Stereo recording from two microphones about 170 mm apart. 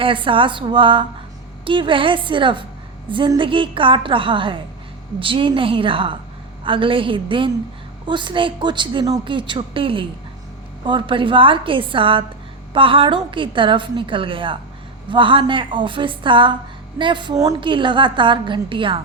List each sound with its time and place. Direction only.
0.0 s a woman's voice: 30° right (ahead or behind)